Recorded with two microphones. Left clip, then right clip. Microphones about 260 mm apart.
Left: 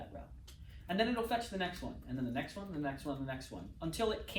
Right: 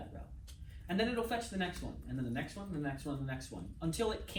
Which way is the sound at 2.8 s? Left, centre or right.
Left.